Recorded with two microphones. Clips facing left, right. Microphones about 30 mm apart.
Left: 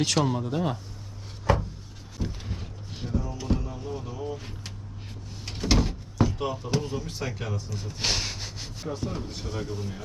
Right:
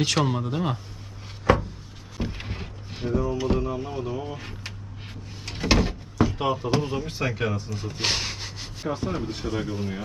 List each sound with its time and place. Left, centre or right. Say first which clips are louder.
0.0 s speech: right 1 dB; centre
2.3 s a sound: right 3 dB; right
2.9 s music: right 6 dB; centre
3.3 s speech: right 6 dB; centre
5.5 s a sound: right 3 dB; right
6.4 s speech: right 5 dB; right
7.7 s rub: right 2 dB; centre
8.9 s speech: right 5 dB; right